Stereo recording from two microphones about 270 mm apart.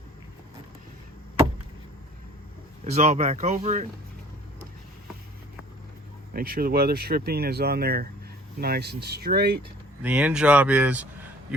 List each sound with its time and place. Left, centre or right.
2.8 s speech: right
6.3 s speech: right
10.0 s speech: centre